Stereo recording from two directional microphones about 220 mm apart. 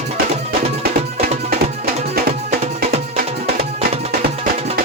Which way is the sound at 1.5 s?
45° right (ahead or behind).